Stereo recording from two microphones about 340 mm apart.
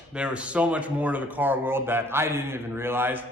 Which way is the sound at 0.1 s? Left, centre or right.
Centre.